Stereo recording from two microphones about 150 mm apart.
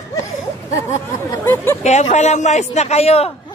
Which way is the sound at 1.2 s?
20° left (ahead or behind).